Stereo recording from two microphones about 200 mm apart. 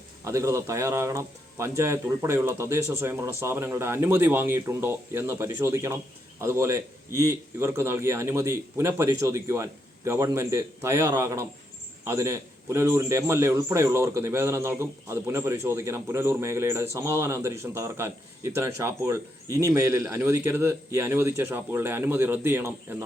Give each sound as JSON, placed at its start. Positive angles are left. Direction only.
{"t": 0.3, "sound": "a man's voice", "side_deg": -15}